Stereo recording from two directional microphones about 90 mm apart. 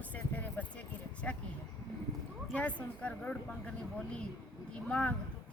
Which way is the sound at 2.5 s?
15° left (ahead or behind).